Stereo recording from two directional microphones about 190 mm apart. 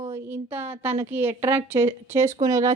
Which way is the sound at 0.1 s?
10° right (ahead or behind).